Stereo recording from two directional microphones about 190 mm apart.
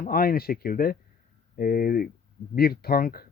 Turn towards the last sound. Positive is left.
turn(degrees=50)  # may be behind; listen again after turning